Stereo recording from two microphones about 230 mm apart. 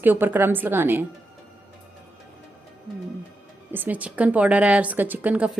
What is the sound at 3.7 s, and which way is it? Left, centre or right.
Speech, centre.